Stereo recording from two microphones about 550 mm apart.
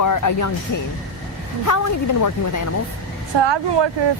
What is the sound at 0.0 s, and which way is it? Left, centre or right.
Speech, left.